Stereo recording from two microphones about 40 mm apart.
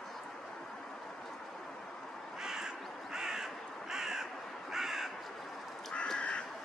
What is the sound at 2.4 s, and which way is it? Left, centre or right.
Crow, centre.